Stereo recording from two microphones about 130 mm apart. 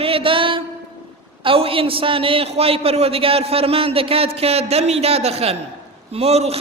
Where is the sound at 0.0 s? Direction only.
45° right (ahead or behind).